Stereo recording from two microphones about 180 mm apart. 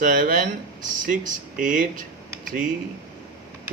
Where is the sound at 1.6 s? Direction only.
50° right (ahead or behind).